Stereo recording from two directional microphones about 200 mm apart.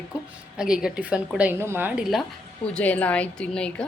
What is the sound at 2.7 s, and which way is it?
A woman's voice, 5° left (ahead or behind).